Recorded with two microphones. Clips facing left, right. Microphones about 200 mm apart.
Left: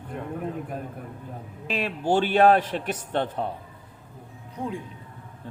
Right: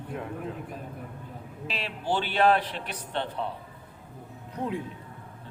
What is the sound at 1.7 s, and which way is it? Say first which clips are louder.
A man's voice: left 6 dB; 50° left (ahead or behind).